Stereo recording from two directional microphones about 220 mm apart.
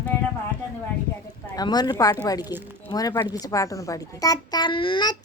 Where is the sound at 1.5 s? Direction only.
20° left (ahead or behind).